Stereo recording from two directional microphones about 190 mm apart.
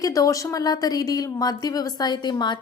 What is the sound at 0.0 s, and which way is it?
A woman's voice, 20° left (ahead or behind).